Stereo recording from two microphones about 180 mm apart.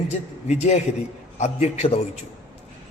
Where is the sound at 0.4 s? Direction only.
40° left (ahead or behind).